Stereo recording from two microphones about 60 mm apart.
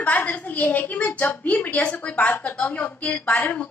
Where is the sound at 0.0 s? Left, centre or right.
Left.